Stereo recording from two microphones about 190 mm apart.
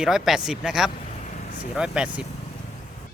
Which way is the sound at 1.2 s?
40° left (ahead or behind).